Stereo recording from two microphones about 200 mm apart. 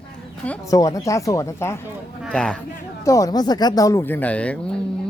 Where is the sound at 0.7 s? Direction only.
15° left (ahead or behind).